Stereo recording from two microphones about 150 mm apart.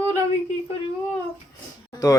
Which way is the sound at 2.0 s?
20° left (ahead or behind).